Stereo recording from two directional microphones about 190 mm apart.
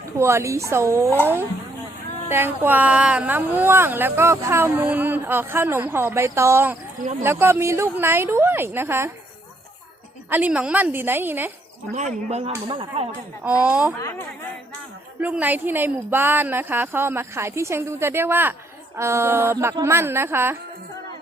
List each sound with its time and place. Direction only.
0.2 s speech: 15° right (ahead or behind)
2.3 s speech: 10° right (ahead or behind)
10.2 s speech: 10° right (ahead or behind)
11.9 s speech: 35° right (ahead or behind)
13.7 s speech: 5° right (ahead or behind)
14.0 s speech: 15° left (ahead or behind)
15.2 s speech: 10° right (ahead or behind)